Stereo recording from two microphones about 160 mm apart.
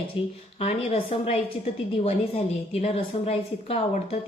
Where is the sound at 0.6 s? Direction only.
35° left (ahead or behind).